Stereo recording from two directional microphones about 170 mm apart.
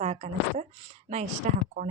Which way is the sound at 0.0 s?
40° right (ahead or behind).